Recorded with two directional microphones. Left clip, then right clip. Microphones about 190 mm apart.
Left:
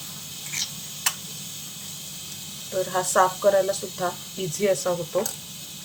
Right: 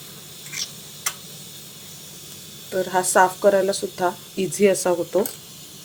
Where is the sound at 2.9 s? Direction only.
35° right (ahead or behind).